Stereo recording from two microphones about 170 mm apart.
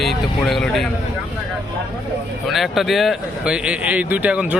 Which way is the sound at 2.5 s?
Centre (ahead or behind).